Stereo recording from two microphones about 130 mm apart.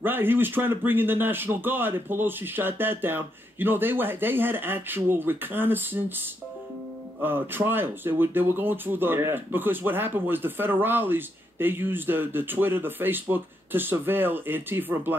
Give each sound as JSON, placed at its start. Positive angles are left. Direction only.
{"t": 0.0, "sound": "speech", "side_deg": -15}